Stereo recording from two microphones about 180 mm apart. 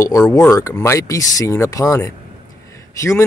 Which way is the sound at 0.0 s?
20° left (ahead or behind).